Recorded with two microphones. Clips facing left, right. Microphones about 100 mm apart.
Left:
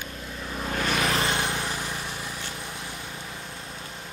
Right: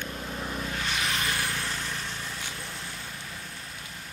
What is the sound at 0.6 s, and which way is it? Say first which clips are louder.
Vehicle: left 9 dB; 55° left (ahead or behind).